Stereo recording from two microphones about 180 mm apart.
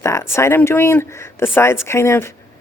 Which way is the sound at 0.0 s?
15° left (ahead or behind).